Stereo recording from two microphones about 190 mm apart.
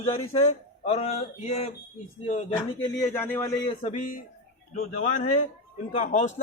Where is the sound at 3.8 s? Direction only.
40° left (ahead or behind).